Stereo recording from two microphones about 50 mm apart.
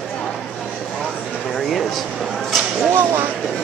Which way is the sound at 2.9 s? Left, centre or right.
Right.